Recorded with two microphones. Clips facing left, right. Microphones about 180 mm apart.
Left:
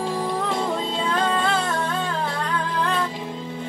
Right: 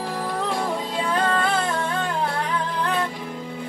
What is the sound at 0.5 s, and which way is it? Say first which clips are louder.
Music: left 1 dB; 5° right (ahead or behind).